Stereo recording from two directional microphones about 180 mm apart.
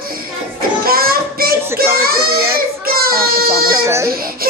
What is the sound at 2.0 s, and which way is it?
Baby cry, 55° right (ahead or behind).